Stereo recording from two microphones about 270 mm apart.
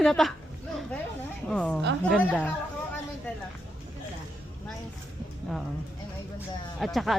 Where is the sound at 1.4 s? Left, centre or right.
Centre.